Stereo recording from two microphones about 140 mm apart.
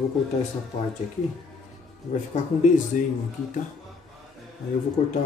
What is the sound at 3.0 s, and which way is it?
Speech, 65° left (ahead or behind).